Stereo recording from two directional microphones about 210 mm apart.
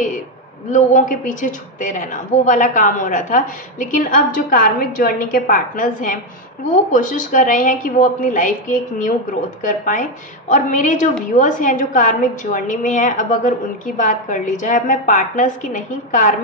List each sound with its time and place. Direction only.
0.7 s a woman's voice: 35° left (ahead or behind)